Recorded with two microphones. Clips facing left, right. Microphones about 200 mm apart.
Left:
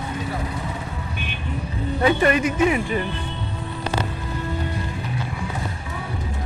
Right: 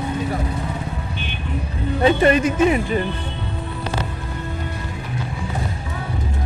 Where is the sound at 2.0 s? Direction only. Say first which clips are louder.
Right 3 dB; 25° right (ahead or behind).